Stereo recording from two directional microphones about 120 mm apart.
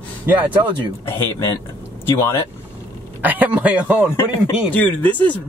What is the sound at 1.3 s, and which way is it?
Speech, 20° left (ahead or behind).